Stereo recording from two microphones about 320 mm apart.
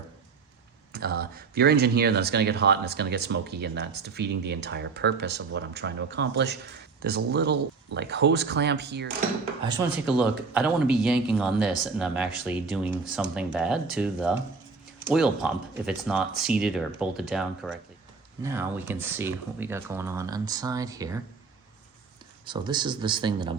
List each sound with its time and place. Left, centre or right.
0.9 s speech: right
9.6 s speech: centre
22.4 s speech: centre